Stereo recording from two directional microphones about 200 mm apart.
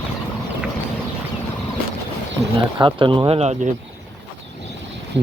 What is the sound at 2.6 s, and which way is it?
Speech, 25° right (ahead or behind).